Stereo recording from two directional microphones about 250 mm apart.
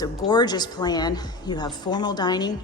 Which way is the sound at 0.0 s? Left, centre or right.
Centre.